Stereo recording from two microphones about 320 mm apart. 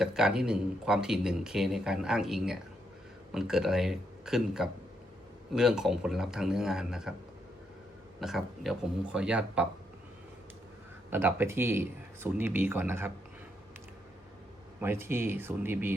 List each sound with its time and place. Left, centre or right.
0.0 s speech: centre
8.2 s speech: centre
11.1 s speech: centre
14.8 s speech: centre